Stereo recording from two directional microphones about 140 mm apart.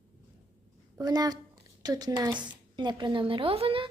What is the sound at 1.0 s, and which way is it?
A woman's voice, 30° right (ahead or behind).